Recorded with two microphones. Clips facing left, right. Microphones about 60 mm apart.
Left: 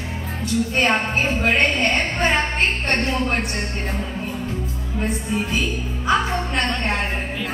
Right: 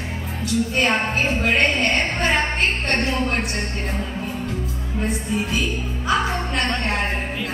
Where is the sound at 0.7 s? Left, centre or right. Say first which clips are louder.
Left 2 dB; centre.